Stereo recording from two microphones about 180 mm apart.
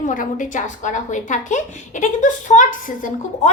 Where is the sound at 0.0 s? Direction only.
45° left (ahead or behind).